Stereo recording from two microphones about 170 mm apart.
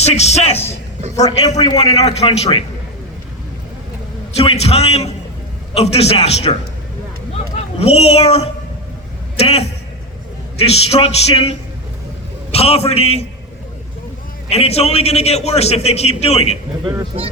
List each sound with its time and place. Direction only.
0.0 s a man's voice: 40° left (ahead or behind)
1.5 s a man's voice: 25° left (ahead or behind)
2.0 s a man's voice: 40° left (ahead or behind)
4.4 s a man's voice: 40° left (ahead or behind)
14.5 s a man's voice: 35° left (ahead or behind)
16.8 s speech: 25° right (ahead or behind)